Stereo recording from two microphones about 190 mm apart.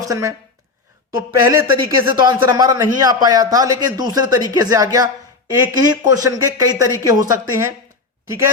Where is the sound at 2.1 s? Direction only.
25° right (ahead or behind).